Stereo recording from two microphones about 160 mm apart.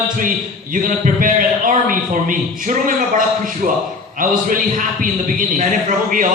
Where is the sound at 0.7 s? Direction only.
55° right (ahead or behind).